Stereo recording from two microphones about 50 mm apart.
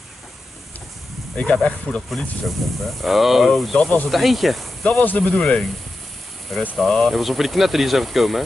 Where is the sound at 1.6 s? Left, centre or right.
Left.